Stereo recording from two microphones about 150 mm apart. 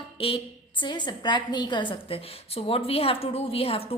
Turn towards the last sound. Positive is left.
turn(degrees=40)  # may be behind; listen again after turning